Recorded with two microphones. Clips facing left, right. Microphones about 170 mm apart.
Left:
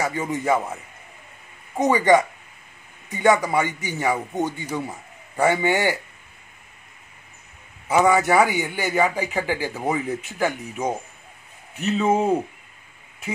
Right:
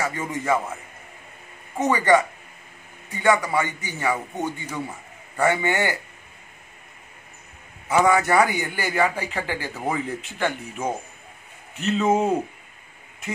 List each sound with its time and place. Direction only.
0.0 s a man's voice: 15° left (ahead or behind)
1.8 s a man's voice: 15° left (ahead or behind)
8.0 s a man's voice: 5° left (ahead or behind)
8.9 s a man's voice: 15° left (ahead or behind)
11.7 s a man's voice: 10° left (ahead or behind)